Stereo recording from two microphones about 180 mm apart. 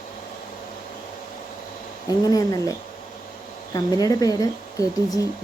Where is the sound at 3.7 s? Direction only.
20° left (ahead or behind).